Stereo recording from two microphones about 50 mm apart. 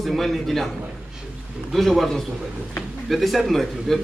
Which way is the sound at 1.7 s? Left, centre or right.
Centre.